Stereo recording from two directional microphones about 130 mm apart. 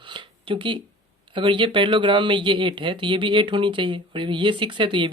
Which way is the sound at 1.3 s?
40° right (ahead or behind).